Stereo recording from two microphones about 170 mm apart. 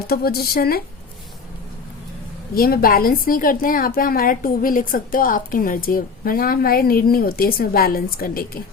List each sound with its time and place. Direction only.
0.1 s a woman's voice: 65° left (ahead or behind)
2.6 s a woman's voice: 60° left (ahead or behind)